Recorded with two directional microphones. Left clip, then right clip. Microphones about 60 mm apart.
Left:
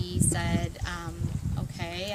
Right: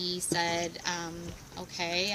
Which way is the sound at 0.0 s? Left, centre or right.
Left.